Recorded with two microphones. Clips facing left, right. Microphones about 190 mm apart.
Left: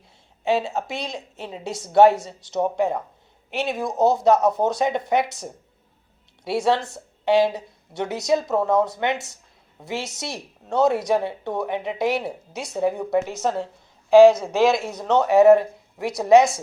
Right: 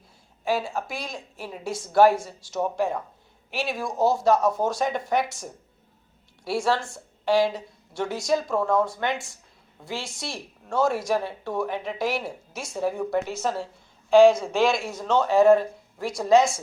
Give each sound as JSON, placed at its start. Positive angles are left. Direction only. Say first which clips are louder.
{"t": 0.4, "sound": "a woman's voice", "louder": "left 4 dB", "side_deg": 25}